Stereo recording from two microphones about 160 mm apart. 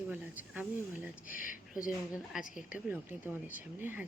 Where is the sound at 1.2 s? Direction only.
60° left (ahead or behind).